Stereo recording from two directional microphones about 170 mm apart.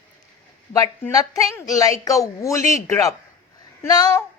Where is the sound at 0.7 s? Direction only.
20° left (ahead or behind).